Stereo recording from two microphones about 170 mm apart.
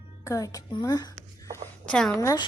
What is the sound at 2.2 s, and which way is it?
Speech, 20° left (ahead or behind).